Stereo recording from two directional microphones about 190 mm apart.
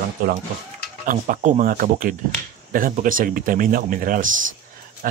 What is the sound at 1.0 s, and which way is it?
Speech, 45° right (ahead or behind).